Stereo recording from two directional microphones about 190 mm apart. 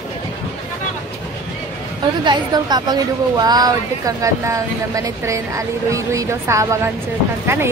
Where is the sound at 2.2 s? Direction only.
25° right (ahead or behind).